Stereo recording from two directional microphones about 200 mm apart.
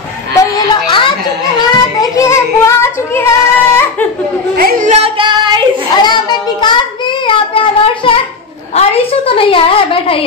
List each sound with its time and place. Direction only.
0.4 s a sound: 25° left (ahead or behind)
2.0 s child singing: 15° left (ahead or behind)
4.6 s yodeling: 45° right (ahead or behind); by 5.6 s 25° right (ahead or behind)
6.0 s a child's voice: 20° left (ahead or behind)